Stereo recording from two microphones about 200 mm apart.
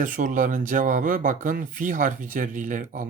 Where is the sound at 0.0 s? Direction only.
40° right (ahead or behind).